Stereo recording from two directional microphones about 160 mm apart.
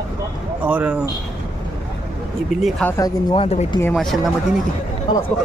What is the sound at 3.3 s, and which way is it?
Speech, 40° left (ahead or behind).